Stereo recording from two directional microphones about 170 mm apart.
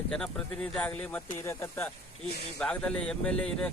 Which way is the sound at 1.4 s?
15° left (ahead or behind).